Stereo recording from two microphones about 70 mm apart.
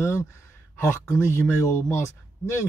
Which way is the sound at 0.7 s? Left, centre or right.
Left.